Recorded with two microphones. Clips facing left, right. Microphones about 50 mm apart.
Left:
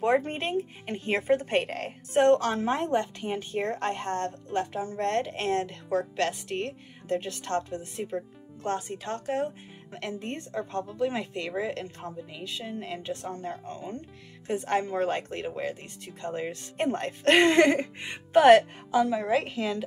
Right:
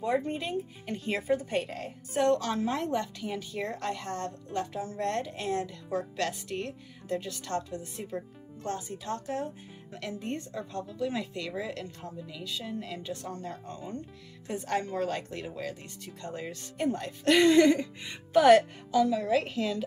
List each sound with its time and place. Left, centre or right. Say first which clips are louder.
0.0 s a woman's voice: left 4 dB; left
16.7 s a woman's voice: left 2 dB; left
18.9 s a woman's voice: left 1 dB; left